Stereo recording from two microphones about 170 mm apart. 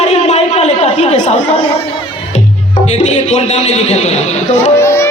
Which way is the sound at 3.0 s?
40° left (ahead or behind).